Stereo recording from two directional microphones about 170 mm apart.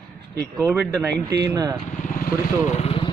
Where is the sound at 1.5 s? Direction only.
20° right (ahead or behind).